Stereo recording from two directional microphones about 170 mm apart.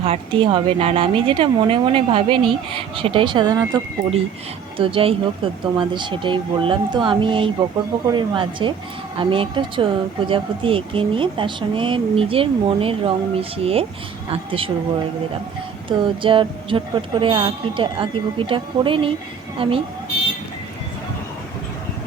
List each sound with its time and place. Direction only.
0.0 s speech: 30° right (ahead or behind)
4.8 s speech: 35° right (ahead or behind)
15.9 s speech: 30° right (ahead or behind)